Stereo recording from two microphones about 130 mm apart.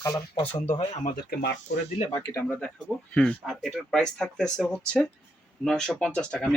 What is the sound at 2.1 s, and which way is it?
Speech, 30° left (ahead or behind).